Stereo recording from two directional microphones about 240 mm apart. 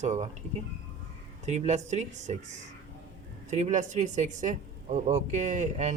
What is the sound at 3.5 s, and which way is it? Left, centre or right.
Speech, right.